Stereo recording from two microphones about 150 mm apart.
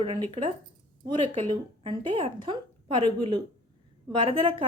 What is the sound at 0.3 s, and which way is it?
A woman's voice, 40° right (ahead or behind).